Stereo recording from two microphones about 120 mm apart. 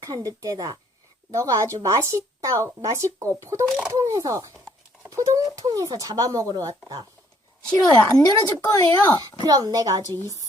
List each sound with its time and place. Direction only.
0.0 s speech: 30° right (ahead or behind)
3.7 s speech: 10° right (ahead or behind)
3.9 s speech: 30° right (ahead or behind)
7.9 s speech: 10° left (ahead or behind)
8.6 s speech: 30° left (ahead or behind)
9.4 s speech: 35° right (ahead or behind)